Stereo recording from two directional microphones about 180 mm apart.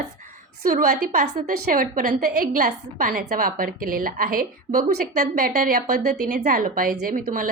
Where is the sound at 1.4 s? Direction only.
45° right (ahead or behind).